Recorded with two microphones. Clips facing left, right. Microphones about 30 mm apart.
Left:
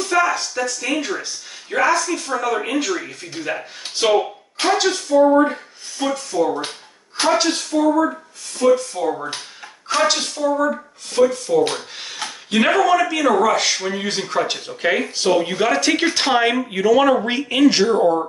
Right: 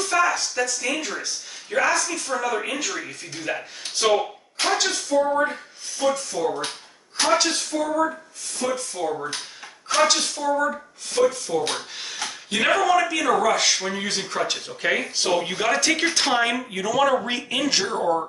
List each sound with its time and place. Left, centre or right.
0.0 s speech: centre